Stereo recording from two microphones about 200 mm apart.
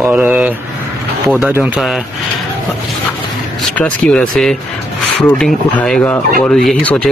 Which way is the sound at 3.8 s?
5° left (ahead or behind).